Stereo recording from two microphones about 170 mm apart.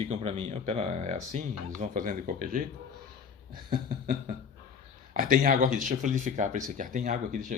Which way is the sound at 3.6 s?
55° right (ahead or behind).